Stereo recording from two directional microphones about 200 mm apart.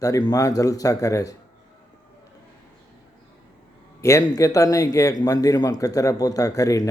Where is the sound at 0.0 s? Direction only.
20° left (ahead or behind).